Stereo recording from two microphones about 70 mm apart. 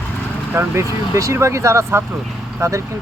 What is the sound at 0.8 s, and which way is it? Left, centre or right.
Speech, right.